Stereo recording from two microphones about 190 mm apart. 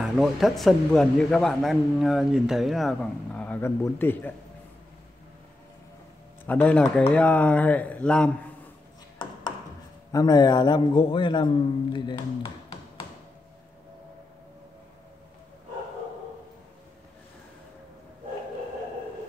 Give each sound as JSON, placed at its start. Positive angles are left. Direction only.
{"t": 0.0, "sound": "speech", "side_deg": 0}
{"t": 6.4, "sound": "speech", "side_deg": 10}
{"t": 10.1, "sound": "a man's voice", "side_deg": 20}